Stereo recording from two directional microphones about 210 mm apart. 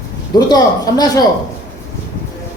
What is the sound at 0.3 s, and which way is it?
Speech, 20° left (ahead or behind).